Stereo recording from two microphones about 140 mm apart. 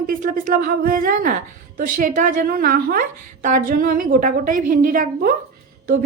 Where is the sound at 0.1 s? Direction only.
75° right (ahead or behind); by 3.0 s 90° right.